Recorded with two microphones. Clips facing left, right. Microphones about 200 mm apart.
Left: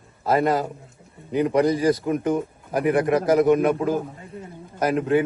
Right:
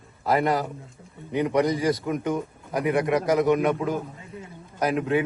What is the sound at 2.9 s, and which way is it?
Speech, centre (ahead or behind).